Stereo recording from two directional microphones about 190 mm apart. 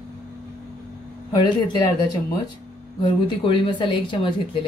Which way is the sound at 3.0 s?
25° left (ahead or behind).